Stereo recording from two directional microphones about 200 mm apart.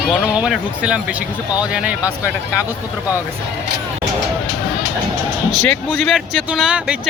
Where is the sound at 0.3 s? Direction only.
5° right (ahead or behind).